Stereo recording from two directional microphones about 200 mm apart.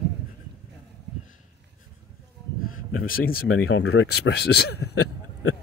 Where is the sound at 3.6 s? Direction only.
85° left.